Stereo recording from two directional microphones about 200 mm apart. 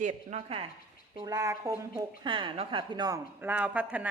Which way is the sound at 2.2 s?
25° right (ahead or behind).